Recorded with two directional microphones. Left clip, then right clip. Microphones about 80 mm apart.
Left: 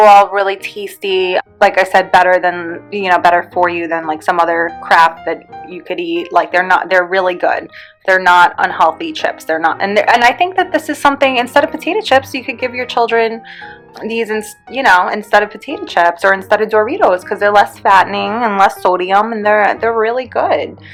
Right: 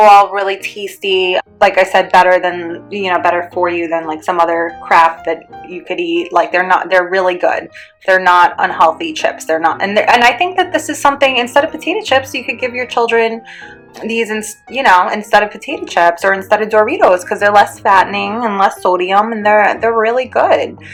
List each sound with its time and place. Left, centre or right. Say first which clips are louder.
0.0 s speech: even; left
1.6 s speech: even; left
3.8 s a woman's voice: left 1 dB; left
11.0 s a woman's voice: right 1 dB; left
16.2 s speech: left 1 dB; left
16.8 s speech: right 2 dB; left
17.8 s speech: left 1 dB; left
18.9 s a woman's voice: even; left
19.8 s speech: right 2 dB; left